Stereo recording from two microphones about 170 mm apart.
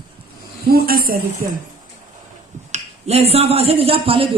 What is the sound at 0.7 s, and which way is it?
Speech, 60° right (ahead or behind).